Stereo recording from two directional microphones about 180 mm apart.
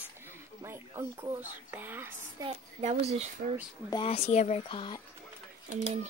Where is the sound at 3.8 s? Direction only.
30° left (ahead or behind).